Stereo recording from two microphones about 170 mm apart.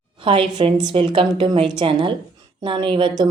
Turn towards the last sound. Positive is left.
turn(degrees=-30)  # may be behind; listen again after turning